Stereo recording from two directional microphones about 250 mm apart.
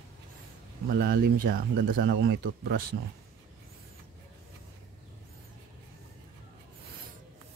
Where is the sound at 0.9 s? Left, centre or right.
Right.